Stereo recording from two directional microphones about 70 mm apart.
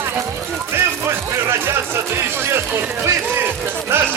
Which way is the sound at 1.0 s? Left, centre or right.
Right.